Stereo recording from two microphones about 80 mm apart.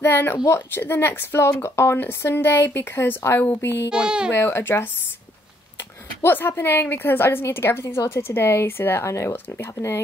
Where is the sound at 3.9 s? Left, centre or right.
Centre.